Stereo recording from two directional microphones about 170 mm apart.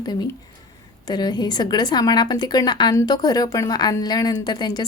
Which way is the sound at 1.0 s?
25° left (ahead or behind).